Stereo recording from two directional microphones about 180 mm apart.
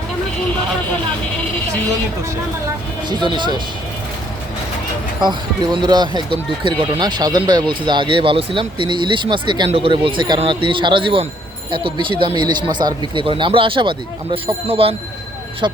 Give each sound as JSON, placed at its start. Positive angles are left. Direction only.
{"t": 3.1, "sound": "speech", "side_deg": -25}
{"t": 5.2, "sound": "speech", "side_deg": -25}
{"t": 12.4, "sound": "speech", "side_deg": -25}